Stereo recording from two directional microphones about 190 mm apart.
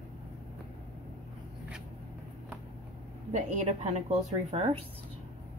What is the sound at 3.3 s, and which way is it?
A woman's voice, 40° right (ahead or behind).